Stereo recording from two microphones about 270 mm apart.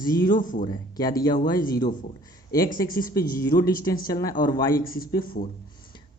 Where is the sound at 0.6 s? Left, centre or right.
Centre.